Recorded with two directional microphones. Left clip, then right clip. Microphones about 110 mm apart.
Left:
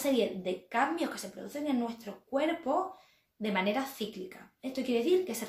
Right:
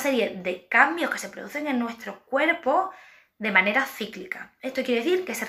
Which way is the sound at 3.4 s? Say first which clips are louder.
Right 10 dB; 40° left (ahead or behind).